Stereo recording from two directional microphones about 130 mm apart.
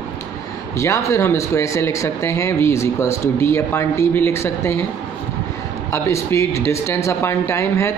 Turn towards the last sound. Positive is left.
turn(degrees=20)  # may be behind; listen again after turning